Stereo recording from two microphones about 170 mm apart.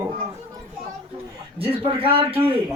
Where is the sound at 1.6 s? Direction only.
35° right (ahead or behind).